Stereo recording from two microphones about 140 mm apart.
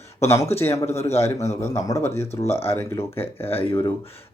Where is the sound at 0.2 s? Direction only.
20° left (ahead or behind).